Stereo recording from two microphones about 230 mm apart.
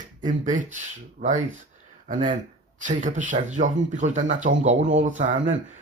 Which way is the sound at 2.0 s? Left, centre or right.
Right.